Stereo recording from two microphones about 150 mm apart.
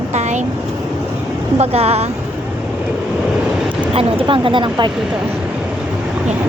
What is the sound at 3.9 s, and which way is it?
A woman's voice, 40° right (ahead or behind).